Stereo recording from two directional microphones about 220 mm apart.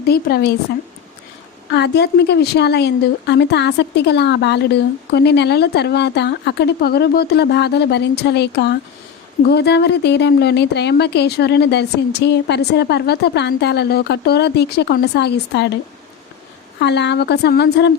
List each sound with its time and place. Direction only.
0.0 s a woman's voice: 45° left (ahead or behind)
1.7 s a woman's voice: 50° left (ahead or behind)
16.8 s a woman's voice: 50° left (ahead or behind)